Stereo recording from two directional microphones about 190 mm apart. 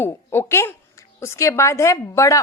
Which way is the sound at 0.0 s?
10° left (ahead or behind).